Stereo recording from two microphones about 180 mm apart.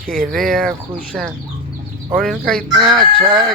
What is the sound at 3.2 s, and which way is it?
Chicken, 25° right (ahead or behind).